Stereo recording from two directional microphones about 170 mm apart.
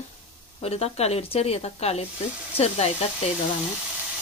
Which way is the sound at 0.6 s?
35° left (ahead or behind).